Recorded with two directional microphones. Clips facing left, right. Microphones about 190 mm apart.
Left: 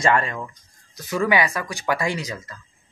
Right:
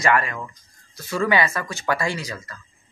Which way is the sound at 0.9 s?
15° left (ahead or behind).